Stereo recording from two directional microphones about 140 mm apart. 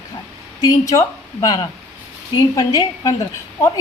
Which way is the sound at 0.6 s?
25° left (ahead or behind).